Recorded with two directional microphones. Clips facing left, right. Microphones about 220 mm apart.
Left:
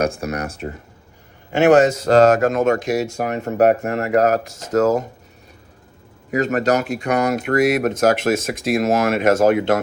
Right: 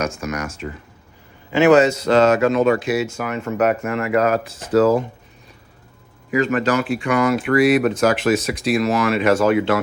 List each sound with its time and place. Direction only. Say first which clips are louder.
0.2 s speech: left 1 dB; 35° left (ahead or behind)
1.5 s speech: even; 45° left (ahead or behind)
6.3 s speech: even; 40° left (ahead or behind)